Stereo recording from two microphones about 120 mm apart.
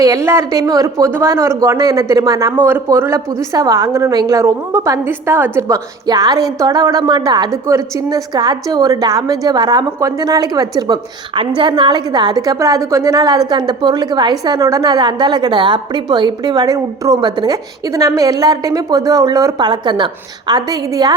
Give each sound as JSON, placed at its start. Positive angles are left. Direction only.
{"t": 0.0, "sound": "a woman's voice", "side_deg": -25}